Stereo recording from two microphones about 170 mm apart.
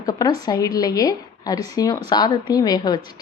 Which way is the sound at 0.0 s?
20° left (ahead or behind).